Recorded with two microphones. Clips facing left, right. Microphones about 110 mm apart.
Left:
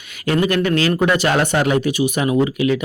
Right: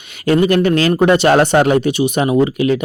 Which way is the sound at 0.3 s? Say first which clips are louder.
Right 5 dB; 30° right (ahead or behind).